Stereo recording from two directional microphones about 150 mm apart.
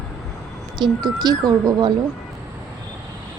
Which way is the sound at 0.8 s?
30° right (ahead or behind).